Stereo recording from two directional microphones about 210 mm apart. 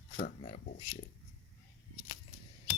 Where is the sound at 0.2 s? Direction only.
40° left (ahead or behind).